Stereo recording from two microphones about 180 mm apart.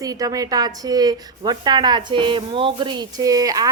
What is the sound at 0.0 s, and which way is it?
A woman's voice, 20° right (ahead or behind).